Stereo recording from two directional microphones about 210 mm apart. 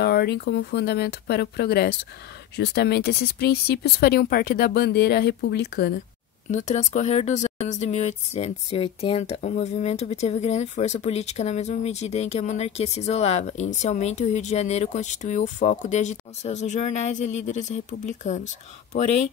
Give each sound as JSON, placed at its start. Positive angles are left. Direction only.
{"t": 0.0, "sound": "speech", "side_deg": 50}
{"t": 6.5, "sound": "speech", "side_deg": 35}